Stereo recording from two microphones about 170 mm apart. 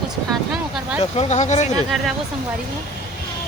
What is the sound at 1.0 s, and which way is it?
Speech, 40° left (ahead or behind).